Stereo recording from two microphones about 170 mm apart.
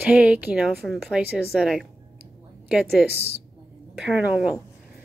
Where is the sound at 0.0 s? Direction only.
5° right (ahead or behind).